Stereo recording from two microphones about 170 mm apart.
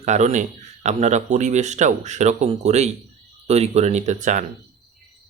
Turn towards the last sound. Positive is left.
turn(degrees=-45)  # may be behind; listen again after turning